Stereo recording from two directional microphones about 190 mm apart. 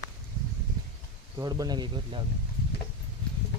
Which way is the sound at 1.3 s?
20° right (ahead or behind).